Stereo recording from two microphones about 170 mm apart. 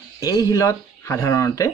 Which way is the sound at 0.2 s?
20° left (ahead or behind).